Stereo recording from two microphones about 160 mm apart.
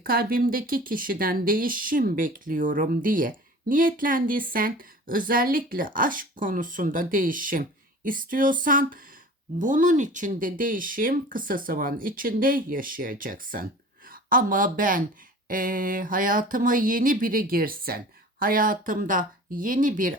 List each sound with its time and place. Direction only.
0.0 s speech: 65° right (ahead or behind)